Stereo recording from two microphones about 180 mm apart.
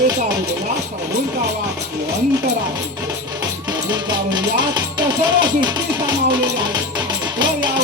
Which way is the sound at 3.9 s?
25° right (ahead or behind).